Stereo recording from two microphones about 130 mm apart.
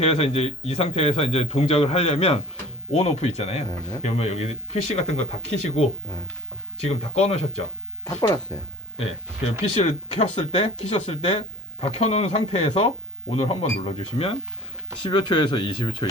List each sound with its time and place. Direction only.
0.0 s speech: 50° left (ahead or behind)
8.5 s speech: 25° left (ahead or behind)
9.7 s speech: 50° left (ahead or behind)